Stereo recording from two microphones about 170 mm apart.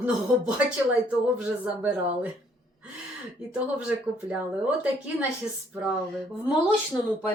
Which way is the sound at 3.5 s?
5° right (ahead or behind).